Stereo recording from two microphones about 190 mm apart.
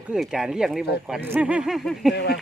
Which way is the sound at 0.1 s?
Centre (ahead or behind).